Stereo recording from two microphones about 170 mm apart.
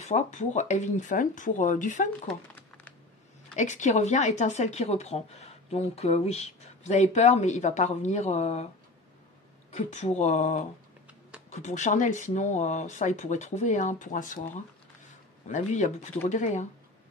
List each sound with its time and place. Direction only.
0.0 s speech: 45° left (ahead or behind)
3.5 s speech: 45° left (ahead or behind)
9.7 s speech: 40° left (ahead or behind)